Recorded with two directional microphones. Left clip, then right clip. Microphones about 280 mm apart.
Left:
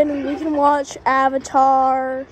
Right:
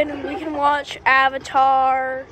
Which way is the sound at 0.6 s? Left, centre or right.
Left.